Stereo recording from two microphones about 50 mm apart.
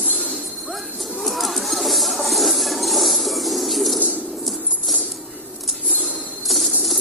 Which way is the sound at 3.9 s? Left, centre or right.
Right.